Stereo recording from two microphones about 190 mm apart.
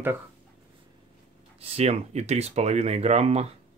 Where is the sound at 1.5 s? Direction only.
30° right (ahead or behind).